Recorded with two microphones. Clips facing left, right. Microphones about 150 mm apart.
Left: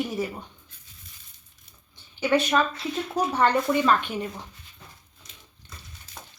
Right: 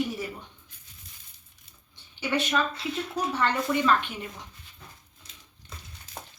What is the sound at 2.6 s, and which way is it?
A woman's voice, 50° left (ahead or behind).